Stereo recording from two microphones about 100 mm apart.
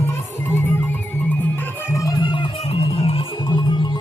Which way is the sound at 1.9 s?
35° left (ahead or behind).